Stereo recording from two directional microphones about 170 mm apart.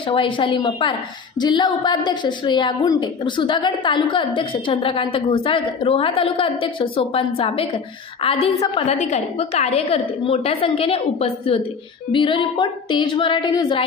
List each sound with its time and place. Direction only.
0.0 s a woman's voice: 30° left (ahead or behind)
8.8 s a woman's voice: 45° left (ahead or behind); by 13.8 s 25° left (ahead or behind)